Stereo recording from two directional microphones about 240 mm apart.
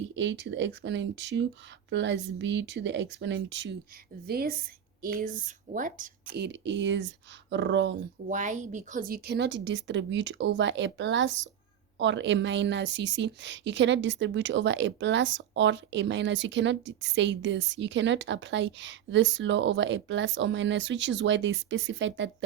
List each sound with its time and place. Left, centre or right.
0.2 s a woman's voice: right
8.3 s a woman's voice: right